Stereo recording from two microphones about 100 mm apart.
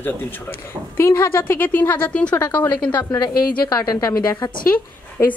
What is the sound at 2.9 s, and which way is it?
Speech, 45° left (ahead or behind).